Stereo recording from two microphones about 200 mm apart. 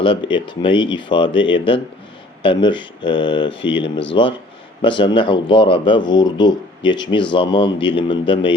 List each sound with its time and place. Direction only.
0.0 s speech: 25° left (ahead or behind)